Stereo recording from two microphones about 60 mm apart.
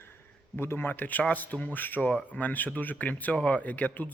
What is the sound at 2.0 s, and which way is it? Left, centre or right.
Speech, left.